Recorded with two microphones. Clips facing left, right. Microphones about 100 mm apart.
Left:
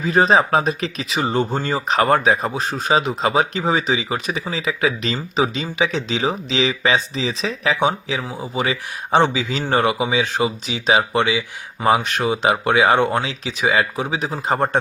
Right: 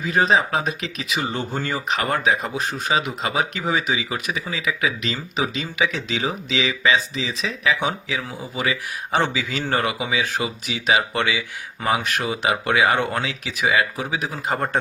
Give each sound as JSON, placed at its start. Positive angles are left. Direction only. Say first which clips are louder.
{"t": 0.0, "sound": "speech", "louder": "left 4 dB", "side_deg": 35}
{"t": 11.9, "sound": "speech", "louder": "left 4 dB", "side_deg": 30}